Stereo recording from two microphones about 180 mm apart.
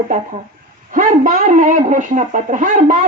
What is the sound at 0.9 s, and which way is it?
A child's voice, 45° right (ahead or behind).